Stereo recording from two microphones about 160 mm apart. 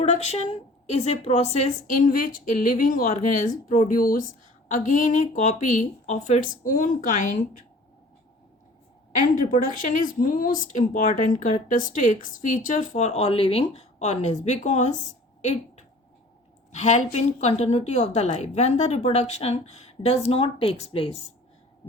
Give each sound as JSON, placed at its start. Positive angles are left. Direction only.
{"t": 0.0, "sound": "speech", "side_deg": 45}
{"t": 9.1, "sound": "speech", "side_deg": 55}